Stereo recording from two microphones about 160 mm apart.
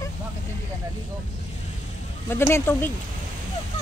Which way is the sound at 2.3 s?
15° left (ahead or behind).